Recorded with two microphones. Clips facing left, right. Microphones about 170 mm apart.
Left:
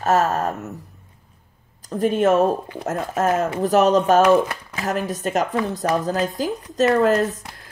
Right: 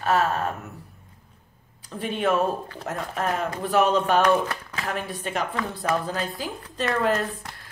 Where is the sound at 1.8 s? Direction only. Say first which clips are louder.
Left 9 dB; 40° left (ahead or behind).